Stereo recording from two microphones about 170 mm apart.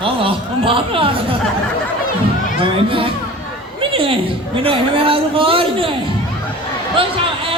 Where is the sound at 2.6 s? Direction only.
30° right (ahead or behind).